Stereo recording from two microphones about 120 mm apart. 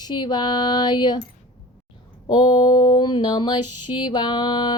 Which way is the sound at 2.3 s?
40° left (ahead or behind).